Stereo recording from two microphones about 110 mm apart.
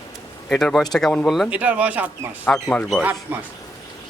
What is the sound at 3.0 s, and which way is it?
Speech, 15° right (ahead or behind).